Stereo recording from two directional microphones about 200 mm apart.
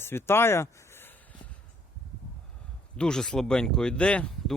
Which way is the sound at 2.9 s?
5° left (ahead or behind).